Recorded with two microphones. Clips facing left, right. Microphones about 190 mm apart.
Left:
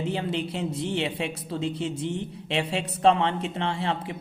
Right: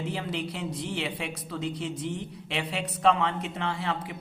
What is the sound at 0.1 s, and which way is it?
A man's voice, 25° left (ahead or behind).